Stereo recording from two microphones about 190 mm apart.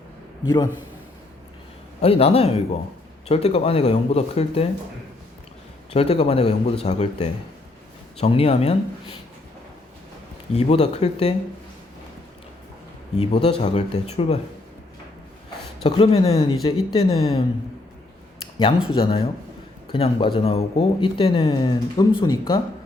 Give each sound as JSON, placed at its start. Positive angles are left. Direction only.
{"t": 0.4, "sound": "speech", "side_deg": 20}
{"t": 2.0, "sound": "speech", "side_deg": 30}
{"t": 5.9, "sound": "speech", "side_deg": 30}
{"t": 10.5, "sound": "speech", "side_deg": 35}
{"t": 13.1, "sound": "speech", "side_deg": 30}
{"t": 15.8, "sound": "speech", "side_deg": 30}
{"t": 18.9, "sound": "speech", "side_deg": 30}